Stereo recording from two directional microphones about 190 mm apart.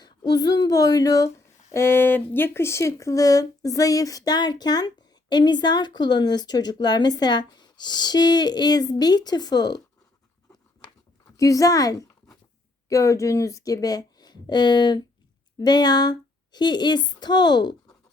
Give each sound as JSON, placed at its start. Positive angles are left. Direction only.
{"t": 0.0, "sound": "speech", "side_deg": 20}
{"t": 11.3, "sound": "a woman's voice", "side_deg": 15}